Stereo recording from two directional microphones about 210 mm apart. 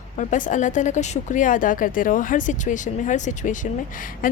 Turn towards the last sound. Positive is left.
turn(degrees=40)  # may be behind; listen again after turning